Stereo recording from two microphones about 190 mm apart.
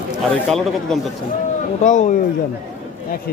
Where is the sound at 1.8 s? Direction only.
40° left (ahead or behind).